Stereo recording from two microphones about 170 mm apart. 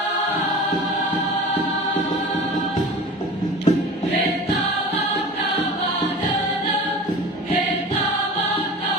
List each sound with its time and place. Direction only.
3.7 s music: 35° left (ahead or behind)